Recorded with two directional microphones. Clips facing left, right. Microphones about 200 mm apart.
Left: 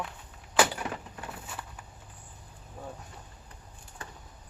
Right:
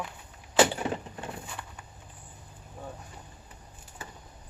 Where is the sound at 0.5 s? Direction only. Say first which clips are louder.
Right 3 dB; 25° right (ahead or behind).